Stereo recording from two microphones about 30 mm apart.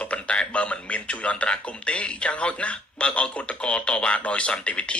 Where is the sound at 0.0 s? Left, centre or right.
Left.